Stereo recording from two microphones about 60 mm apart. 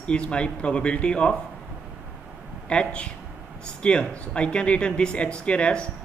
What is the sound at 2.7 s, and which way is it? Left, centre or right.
Speech, centre.